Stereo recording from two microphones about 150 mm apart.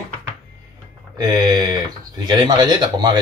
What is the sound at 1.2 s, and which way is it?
A man's voice, 25° right (ahead or behind).